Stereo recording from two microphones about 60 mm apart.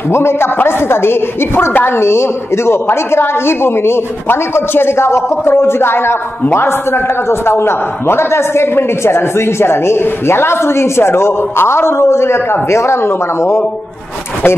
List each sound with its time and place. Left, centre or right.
0.1 s a woman's voice: left